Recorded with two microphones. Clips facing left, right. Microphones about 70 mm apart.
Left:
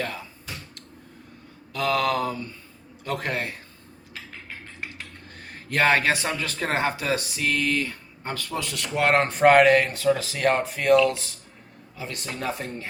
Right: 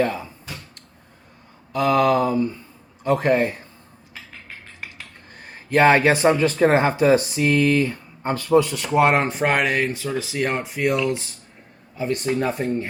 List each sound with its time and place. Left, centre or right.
0.0 s a sound: centre
1.7 s speech: centre
5.5 s speech: centre
6.1 s speech: right
8.6 s speech: centre
9.3 s speech: centre; by 12.9 s right